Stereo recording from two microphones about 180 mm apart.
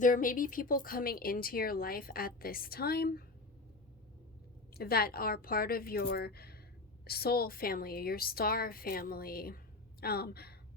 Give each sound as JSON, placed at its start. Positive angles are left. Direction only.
{"t": 0.0, "sound": "speech", "side_deg": 50}
{"t": 4.8, "sound": "speech", "side_deg": 60}